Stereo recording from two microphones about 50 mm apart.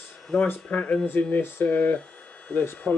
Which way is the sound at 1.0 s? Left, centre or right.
Left.